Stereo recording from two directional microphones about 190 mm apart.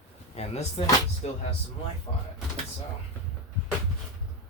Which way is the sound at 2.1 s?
20° left (ahead or behind).